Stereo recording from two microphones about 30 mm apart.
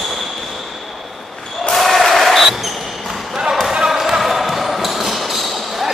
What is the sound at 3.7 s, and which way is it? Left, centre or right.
Basketball bounce, right.